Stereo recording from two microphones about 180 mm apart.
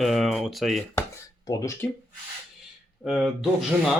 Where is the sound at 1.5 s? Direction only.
15° left (ahead or behind).